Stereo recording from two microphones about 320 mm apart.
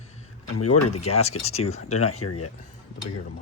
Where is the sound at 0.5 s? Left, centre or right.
Left.